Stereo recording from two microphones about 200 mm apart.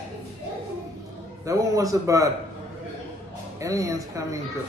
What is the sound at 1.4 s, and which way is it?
Speech, 15° right (ahead or behind).